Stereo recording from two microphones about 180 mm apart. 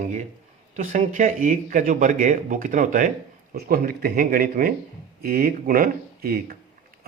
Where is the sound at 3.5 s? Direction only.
55° right (ahead or behind).